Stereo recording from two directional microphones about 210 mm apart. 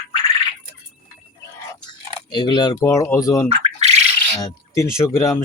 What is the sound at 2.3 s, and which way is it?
Speech, 20° left (ahead or behind).